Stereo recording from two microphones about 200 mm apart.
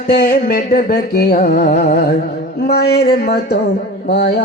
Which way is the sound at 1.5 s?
35° left (ahead or behind).